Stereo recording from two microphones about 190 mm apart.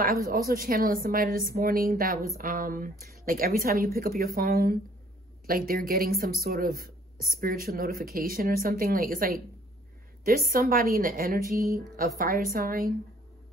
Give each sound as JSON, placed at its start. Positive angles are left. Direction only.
{"t": 0.0, "sound": "speech", "side_deg": -50}